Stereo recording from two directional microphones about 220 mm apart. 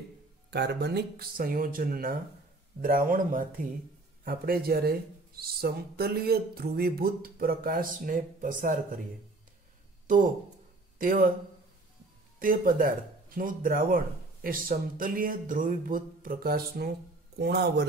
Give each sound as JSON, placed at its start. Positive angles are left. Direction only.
{"t": 0.5, "sound": "speech", "side_deg": -50}
{"t": 10.0, "sound": "speech", "side_deg": -40}
{"t": 12.4, "sound": "speech", "side_deg": -40}